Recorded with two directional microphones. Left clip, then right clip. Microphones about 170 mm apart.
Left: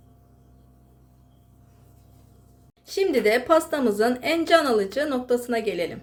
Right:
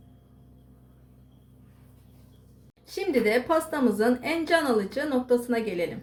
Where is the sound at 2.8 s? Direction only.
35° left (ahead or behind).